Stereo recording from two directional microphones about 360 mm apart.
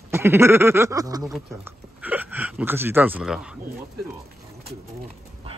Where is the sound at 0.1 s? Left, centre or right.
Centre.